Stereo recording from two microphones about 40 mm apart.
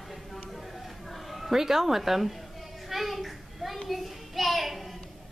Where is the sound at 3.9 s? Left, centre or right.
Centre.